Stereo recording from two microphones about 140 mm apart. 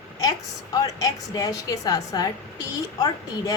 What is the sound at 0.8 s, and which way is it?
A woman's voice, 25° left (ahead or behind).